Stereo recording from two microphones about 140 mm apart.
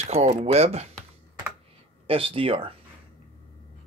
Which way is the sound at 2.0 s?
40° right (ahead or behind).